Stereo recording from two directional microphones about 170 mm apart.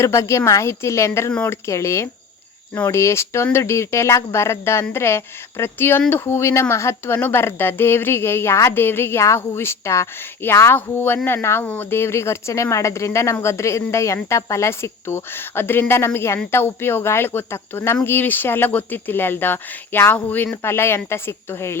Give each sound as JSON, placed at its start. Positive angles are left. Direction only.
{"t": 0.0, "sound": "speech", "side_deg": 15}